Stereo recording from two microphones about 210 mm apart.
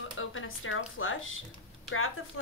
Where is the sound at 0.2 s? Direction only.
70° left (ahead or behind).